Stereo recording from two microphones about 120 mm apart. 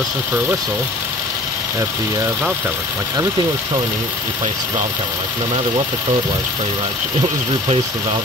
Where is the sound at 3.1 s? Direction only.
30° right (ahead or behind).